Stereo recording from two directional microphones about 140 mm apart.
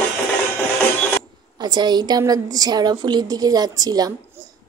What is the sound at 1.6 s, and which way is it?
A woman's voice, 30° right (ahead or behind).